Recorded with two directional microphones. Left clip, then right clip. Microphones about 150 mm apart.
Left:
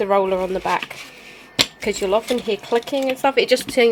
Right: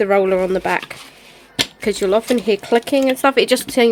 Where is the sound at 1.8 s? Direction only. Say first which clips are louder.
Right 3 dB; 45° right (ahead or behind).